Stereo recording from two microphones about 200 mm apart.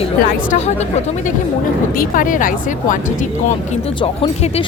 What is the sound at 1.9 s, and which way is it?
A woman's voice, 45° left (ahead or behind).